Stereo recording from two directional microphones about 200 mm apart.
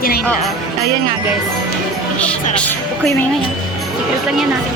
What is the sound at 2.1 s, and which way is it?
Speech, 5° left (ahead or behind).